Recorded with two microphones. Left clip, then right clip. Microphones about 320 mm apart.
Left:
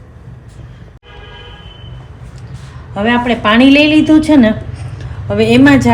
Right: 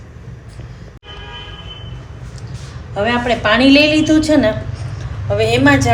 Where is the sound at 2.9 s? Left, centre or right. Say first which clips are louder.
Left 2 dB; left.